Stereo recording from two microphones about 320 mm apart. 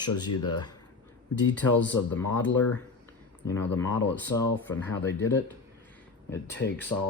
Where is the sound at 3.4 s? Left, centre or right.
Centre.